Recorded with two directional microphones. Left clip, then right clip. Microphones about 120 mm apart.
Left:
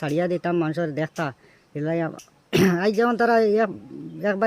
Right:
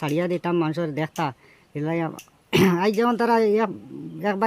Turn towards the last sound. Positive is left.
turn(degrees=-25)  # may be behind; listen again after turning